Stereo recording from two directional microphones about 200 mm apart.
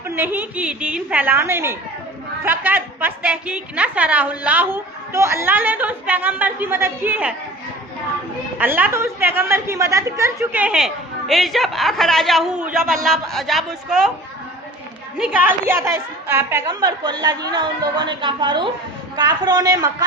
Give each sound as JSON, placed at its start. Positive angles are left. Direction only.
{"t": 0.2, "sound": "a woman's voice", "side_deg": -10}
{"t": 8.5, "sound": "a woman's voice", "side_deg": -10}
{"t": 15.2, "sound": "a woman's voice", "side_deg": -10}